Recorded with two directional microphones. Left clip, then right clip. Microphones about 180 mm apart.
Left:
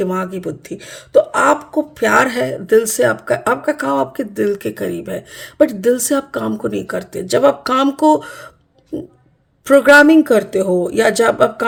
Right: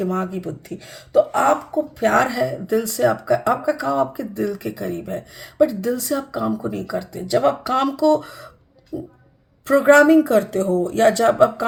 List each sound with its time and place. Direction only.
0.0 s speech: 45° left (ahead or behind)
9.6 s speech: 40° left (ahead or behind)